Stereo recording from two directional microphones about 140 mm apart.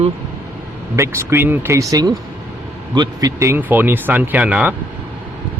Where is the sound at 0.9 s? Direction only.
20° right (ahead or behind).